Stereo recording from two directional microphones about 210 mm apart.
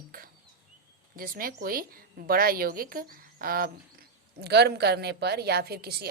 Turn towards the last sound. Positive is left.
turn(degrees=-50)  # may be behind; listen again after turning